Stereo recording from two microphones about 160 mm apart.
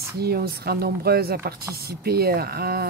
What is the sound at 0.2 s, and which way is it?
Speech, 75° right (ahead or behind).